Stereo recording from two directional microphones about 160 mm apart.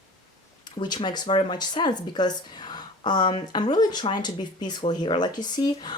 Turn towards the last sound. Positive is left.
turn(degrees=25)  # may be behind; listen again after turning